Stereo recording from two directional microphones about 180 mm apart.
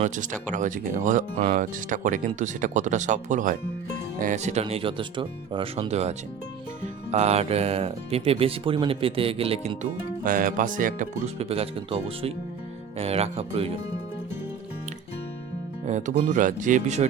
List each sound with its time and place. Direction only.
0.0 s speech: 45° right (ahead or behind)
10.2 s speech: 50° right (ahead or behind)
11.3 s speech: 35° right (ahead or behind)
15.9 s speech: 40° right (ahead or behind)